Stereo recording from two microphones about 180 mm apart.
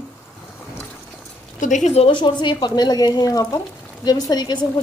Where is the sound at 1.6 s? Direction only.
45° left (ahead or behind).